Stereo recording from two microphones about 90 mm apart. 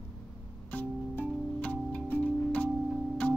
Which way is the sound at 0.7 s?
15° left (ahead or behind).